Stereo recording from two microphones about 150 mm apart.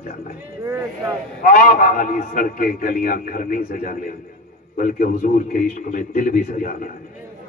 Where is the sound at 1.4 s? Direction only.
70° left (ahead or behind).